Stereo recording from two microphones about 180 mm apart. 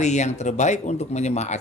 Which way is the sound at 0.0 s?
40° left (ahead or behind).